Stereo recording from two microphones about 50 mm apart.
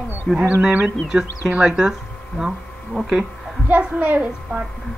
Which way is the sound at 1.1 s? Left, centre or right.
Centre.